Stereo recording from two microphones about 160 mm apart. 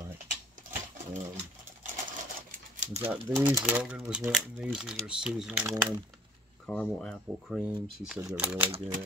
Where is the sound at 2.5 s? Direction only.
50° right (ahead or behind).